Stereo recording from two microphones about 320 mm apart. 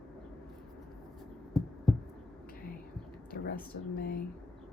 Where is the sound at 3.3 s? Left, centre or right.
Left.